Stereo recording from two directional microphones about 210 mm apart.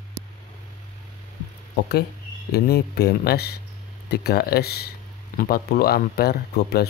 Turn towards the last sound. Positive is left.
turn(degrees=50)  # may be behind; listen again after turning